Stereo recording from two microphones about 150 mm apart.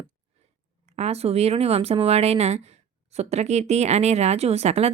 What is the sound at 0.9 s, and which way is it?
Speech, 45° right (ahead or behind).